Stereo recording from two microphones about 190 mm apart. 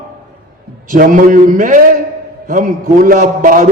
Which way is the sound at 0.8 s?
45° right (ahead or behind).